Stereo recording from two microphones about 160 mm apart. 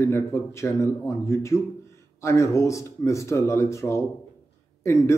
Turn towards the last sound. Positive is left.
turn(degrees=20)  # may be behind; listen again after turning